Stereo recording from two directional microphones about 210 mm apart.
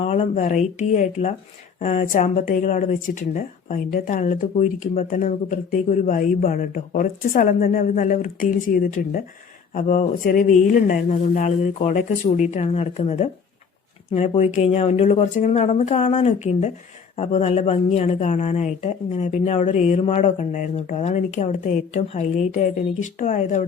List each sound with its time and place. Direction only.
0.0 s speech: 30° left (ahead or behind)